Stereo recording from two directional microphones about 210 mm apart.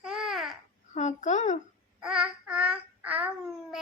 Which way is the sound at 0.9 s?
35° left (ahead or behind).